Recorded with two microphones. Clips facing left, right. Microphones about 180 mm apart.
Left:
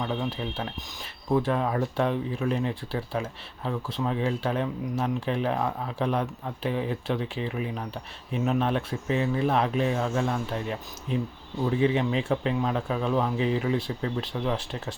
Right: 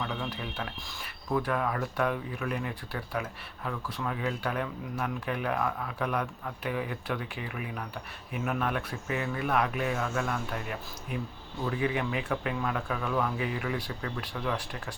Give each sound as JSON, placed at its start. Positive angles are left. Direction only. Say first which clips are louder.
{"t": 0.0, "sound": "speech", "louder": "left 5 dB", "side_deg": 25}